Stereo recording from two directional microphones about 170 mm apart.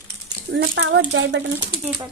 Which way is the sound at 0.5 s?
90° right.